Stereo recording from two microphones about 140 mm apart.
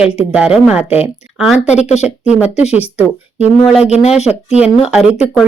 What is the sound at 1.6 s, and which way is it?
Speech, 55° left (ahead or behind).